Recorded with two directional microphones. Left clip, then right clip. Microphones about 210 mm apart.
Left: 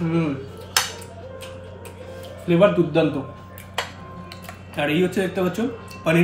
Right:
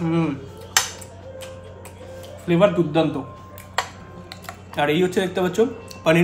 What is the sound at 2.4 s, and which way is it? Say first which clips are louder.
Speech: left 1 dB; centre (ahead or behind).